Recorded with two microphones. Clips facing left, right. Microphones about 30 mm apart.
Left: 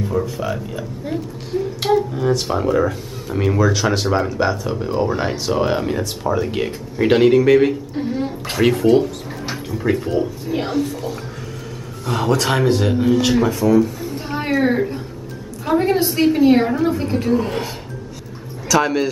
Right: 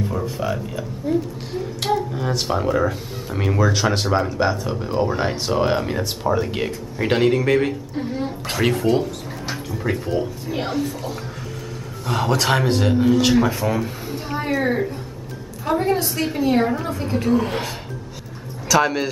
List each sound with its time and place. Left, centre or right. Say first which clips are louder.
0.0 s speech: left 3 dB; centre
1.1 s a woman's voice: right 5 dB; left
1.8 s speech: left 4 dB; centre
13.6 s speech: left 8 dB; centre
14.5 s a woman's voice: left 4 dB; centre
18.7 s speech: left 1 dB; centre